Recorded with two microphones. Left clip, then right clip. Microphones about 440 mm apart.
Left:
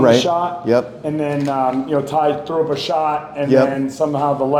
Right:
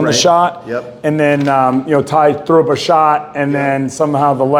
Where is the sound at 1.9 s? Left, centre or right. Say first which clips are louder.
Right 6 dB; right.